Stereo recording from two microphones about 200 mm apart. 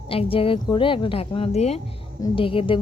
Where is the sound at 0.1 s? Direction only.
25° left (ahead or behind).